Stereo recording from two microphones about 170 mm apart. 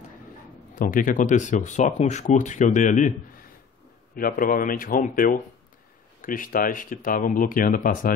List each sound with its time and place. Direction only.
0.7 s speech: 55° left (ahead or behind)